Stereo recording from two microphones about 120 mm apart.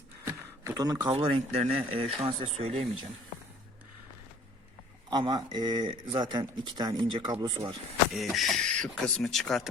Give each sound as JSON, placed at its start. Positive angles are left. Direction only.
{"t": 0.3, "sound": "a sound", "side_deg": -25}
{"t": 1.1, "sound": "speech", "side_deg": -55}
{"t": 5.1, "sound": "speech", "side_deg": -40}
{"t": 8.1, "sound": "speech", "side_deg": 0}